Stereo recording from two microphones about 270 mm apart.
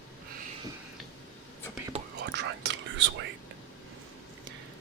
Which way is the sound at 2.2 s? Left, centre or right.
Right.